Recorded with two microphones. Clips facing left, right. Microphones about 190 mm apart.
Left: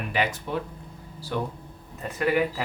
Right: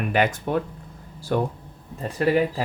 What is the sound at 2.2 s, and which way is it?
Speech, 30° right (ahead or behind).